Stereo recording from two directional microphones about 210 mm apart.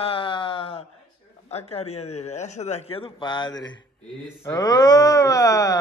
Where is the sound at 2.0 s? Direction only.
90° left.